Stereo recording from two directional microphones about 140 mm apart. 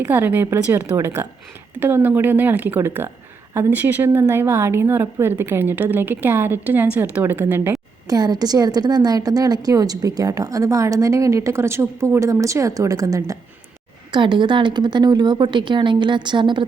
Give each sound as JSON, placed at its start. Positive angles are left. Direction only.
{"t": 0.0, "sound": "a woman's voice", "side_deg": -15}
{"t": 14.1, "sound": "a woman's voice", "side_deg": -35}